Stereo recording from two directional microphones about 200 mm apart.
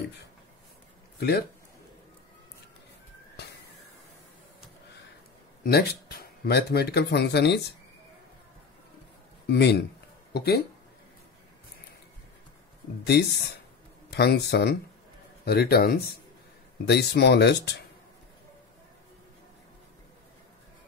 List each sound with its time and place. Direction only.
5.6 s speech: 50° left (ahead or behind)
9.5 s speech: 55° left (ahead or behind)
13.0 s speech: 55° left (ahead or behind)